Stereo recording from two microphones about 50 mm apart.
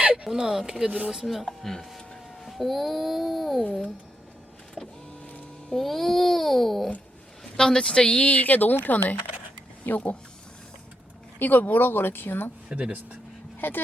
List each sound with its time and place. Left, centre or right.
0.0 s a sound: right
0.3 s speech: centre
0.9 s speech: right
1.1 s speech: centre
5.7 s speech: centre
8.3 s speech: left
11.3 s speech: left
12.6 s speech: right
13.6 s speech: left